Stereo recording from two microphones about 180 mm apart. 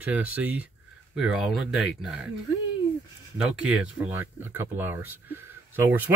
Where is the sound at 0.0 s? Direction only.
10° right (ahead or behind).